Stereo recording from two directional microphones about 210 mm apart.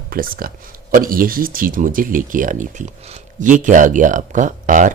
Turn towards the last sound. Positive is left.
turn(degrees=-40)  # may be behind; listen again after turning